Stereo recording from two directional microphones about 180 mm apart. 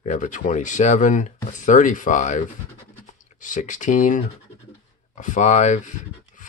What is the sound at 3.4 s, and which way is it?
Speech, 45° left (ahead or behind).